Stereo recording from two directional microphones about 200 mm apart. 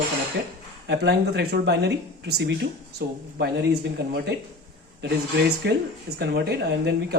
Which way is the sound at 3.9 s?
60° right (ahead or behind).